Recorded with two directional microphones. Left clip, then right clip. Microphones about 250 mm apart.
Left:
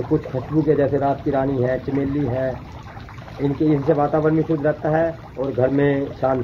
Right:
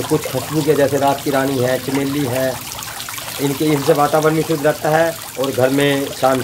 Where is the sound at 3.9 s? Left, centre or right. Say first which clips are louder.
Right 4 dB; centre.